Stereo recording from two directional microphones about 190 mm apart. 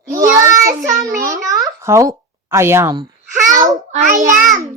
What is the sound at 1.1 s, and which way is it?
Speech, 45° right (ahead or behind).